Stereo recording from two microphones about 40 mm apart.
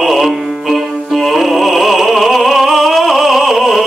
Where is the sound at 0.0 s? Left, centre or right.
Centre.